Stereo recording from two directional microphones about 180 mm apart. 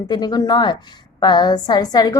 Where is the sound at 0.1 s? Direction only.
20° left (ahead or behind).